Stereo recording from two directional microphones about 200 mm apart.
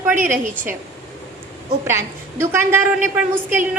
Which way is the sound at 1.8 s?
15° right (ahead or behind).